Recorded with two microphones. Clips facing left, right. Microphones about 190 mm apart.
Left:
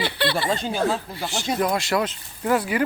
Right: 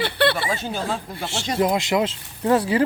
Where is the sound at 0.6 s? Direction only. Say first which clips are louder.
Left 3 dB; 10° left (ahead or behind).